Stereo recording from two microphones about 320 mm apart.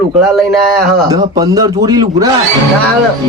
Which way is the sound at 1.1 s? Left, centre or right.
Centre.